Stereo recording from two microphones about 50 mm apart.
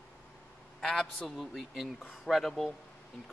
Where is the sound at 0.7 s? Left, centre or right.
Centre.